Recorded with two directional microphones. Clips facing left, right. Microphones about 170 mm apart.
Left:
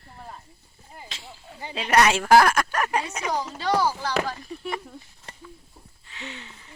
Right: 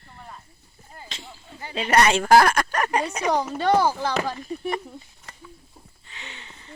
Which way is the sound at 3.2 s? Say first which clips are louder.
Right 7 dB; 55° right (ahead or behind).